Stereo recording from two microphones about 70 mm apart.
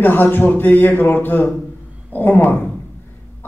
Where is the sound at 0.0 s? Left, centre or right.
Left.